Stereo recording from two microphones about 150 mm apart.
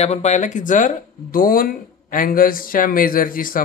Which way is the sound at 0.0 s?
45° left (ahead or behind).